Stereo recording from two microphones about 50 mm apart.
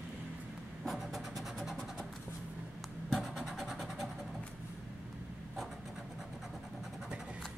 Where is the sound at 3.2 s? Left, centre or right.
Centre.